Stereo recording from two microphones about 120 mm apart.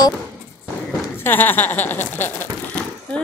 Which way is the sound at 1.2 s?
15° left (ahead or behind).